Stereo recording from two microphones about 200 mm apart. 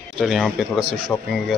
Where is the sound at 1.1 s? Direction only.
20° left (ahead or behind).